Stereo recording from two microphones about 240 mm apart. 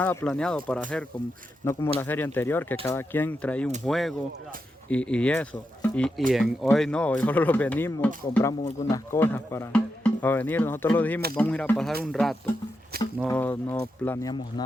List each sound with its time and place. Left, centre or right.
0.0 s speech: centre